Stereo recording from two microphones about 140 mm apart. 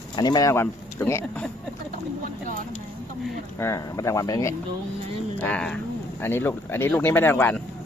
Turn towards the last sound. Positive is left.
turn(degrees=15)  # may be behind; listen again after turning